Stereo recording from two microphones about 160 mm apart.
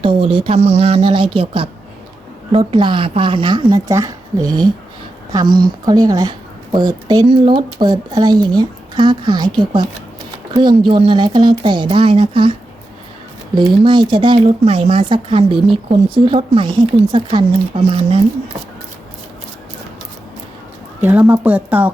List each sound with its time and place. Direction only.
0.0 s a woman's voice: 35° right (ahead or behind)
13.6 s speech: 30° right (ahead or behind)
21.0 s speech: 10° right (ahead or behind)